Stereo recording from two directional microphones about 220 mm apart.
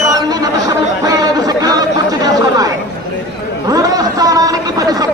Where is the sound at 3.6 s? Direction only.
15° right (ahead or behind).